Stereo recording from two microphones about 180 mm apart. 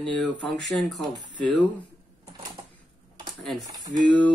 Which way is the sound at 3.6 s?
20° right (ahead or behind).